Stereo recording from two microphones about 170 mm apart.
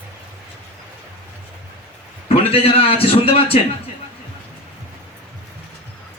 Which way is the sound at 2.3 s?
35° left (ahead or behind).